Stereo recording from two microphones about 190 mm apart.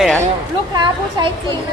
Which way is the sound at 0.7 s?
25° right (ahead or behind).